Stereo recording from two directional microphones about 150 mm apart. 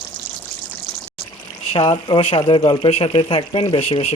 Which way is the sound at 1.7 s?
35° left (ahead or behind).